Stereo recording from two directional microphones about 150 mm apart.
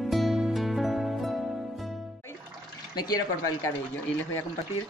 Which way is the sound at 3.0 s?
25° left (ahead or behind).